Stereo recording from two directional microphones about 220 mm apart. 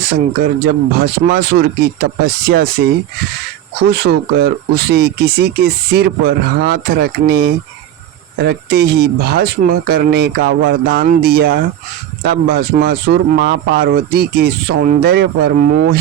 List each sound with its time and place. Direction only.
0.6 s speech: 45° right (ahead or behind)
3.8 s speech: 45° right (ahead or behind)